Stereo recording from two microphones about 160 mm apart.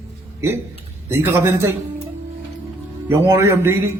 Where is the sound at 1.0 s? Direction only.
15° right (ahead or behind).